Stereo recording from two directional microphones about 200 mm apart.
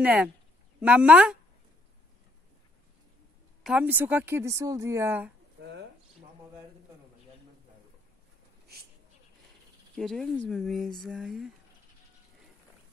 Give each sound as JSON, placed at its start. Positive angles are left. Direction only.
{"t": 0.0, "sound": "speech", "side_deg": -5}
{"t": 3.6, "sound": "speech", "side_deg": -5}
{"t": 5.6, "sound": "a sound", "side_deg": -60}
{"t": 9.9, "sound": "speech", "side_deg": 0}